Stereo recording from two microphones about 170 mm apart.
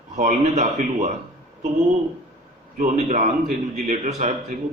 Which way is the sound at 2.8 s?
45° right (ahead or behind).